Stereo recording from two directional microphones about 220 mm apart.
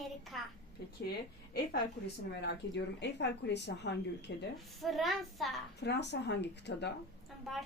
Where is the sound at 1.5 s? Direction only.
50° left (ahead or behind).